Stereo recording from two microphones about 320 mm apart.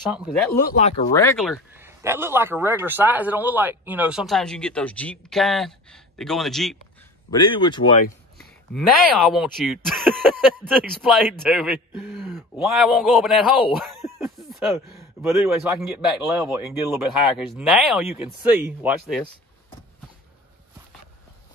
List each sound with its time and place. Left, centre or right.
0.0 s speech: centre
0.6 s speech: left
1.1 s speech: centre
7.2 s speech: centre
9.3 s speech: centre